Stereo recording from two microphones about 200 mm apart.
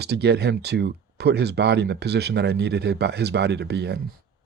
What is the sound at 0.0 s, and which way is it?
Speech, 55° right (ahead or behind).